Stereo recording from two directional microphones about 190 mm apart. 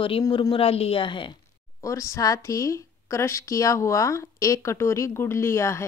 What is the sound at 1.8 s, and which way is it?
A woman's voice, 15° left (ahead or behind).